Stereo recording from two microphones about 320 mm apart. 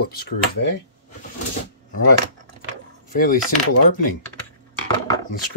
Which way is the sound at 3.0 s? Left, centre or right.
Left.